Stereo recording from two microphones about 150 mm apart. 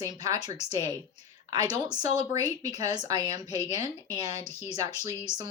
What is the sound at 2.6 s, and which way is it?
A woman's voice, 25° right (ahead or behind).